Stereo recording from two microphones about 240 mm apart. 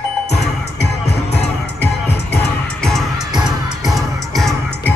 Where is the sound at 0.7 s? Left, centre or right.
Left.